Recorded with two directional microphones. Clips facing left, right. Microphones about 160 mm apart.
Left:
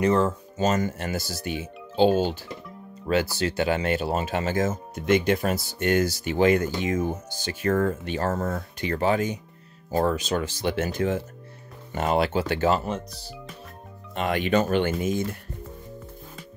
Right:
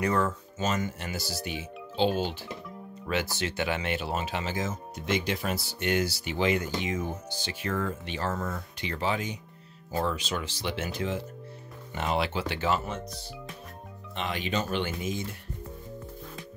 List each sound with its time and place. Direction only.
0.0 s speech: 25° left (ahead or behind); by 2.1 s 45° left (ahead or behind)
3.1 s speech: 35° left (ahead or behind)
14.1 s speech: 55° left (ahead or behind)